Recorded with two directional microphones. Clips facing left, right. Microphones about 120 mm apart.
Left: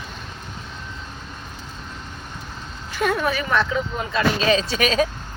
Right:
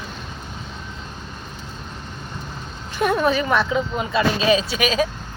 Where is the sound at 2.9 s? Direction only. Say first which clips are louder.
Right 3 dB; 20° right (ahead or behind).